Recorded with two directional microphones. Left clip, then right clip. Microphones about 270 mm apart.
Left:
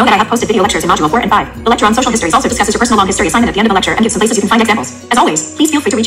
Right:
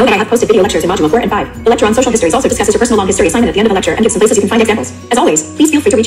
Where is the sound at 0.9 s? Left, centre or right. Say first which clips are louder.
Left 1 dB; left.